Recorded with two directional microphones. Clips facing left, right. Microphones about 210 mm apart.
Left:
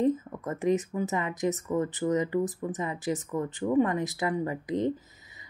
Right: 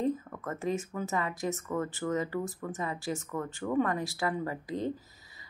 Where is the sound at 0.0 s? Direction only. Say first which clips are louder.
Left 5 dB; 20° left (ahead or behind).